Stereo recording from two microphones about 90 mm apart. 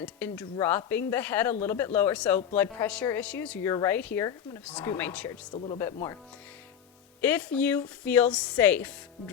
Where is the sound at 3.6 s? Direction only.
40° left (ahead or behind).